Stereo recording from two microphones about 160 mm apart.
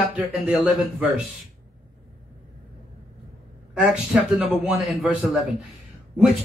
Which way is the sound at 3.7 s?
5° right (ahead or behind).